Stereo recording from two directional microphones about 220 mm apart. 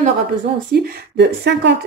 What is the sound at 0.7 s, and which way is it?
Speech, 45° right (ahead or behind).